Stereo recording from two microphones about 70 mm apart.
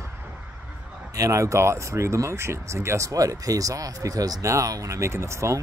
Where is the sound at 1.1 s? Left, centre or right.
Right.